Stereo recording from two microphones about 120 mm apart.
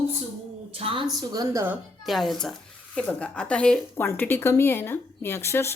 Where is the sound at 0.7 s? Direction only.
50° right (ahead or behind).